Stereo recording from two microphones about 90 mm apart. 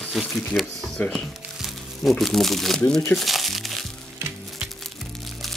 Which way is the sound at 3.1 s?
Centre (ahead or behind).